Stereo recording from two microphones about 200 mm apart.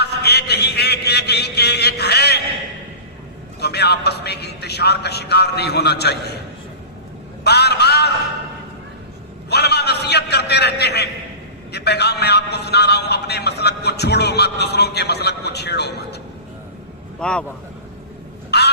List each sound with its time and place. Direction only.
0.0 s a sound: 55° left (ahead or behind)
3.6 s a man's voice: 55° left (ahead or behind)
7.4 s a man's voice: 55° left (ahead or behind)
9.5 s a man's voice: 55° left (ahead or behind)
17.2 s a man's voice: 5° left (ahead or behind)
18.5 s a sound: 55° left (ahead or behind)